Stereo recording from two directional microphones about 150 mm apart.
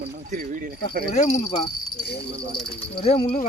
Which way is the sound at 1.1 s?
45° left (ahead or behind).